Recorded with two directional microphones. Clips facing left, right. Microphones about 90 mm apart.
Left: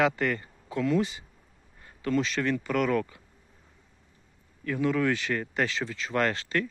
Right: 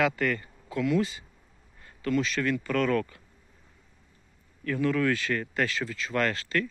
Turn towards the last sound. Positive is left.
turn(degrees=25)  # may be behind; listen again after turning